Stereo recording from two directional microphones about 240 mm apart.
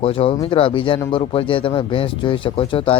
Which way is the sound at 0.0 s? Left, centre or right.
Left.